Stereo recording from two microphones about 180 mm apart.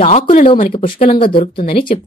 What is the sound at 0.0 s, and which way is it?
Speech, 45° left (ahead or behind).